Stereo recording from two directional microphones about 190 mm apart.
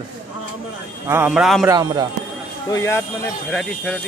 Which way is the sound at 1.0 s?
10° right (ahead or behind).